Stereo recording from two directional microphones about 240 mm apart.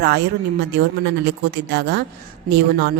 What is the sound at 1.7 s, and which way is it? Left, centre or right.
Speech, right.